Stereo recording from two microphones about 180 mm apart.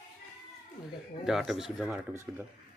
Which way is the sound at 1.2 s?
Centre (ahead or behind).